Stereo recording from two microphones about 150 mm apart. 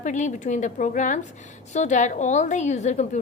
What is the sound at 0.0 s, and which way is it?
A woman's voice, 55° left (ahead or behind).